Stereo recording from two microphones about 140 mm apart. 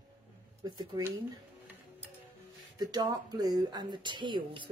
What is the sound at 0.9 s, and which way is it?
Speech, 35° right (ahead or behind).